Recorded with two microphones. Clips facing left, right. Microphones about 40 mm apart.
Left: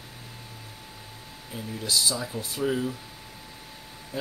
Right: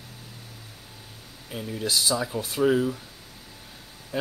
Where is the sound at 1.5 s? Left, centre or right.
Right.